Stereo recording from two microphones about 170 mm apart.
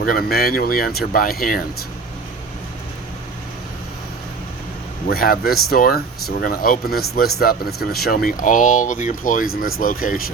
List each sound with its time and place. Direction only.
0.0 s speech: 60° left (ahead or behind)
5.0 s speech: 60° left (ahead or behind)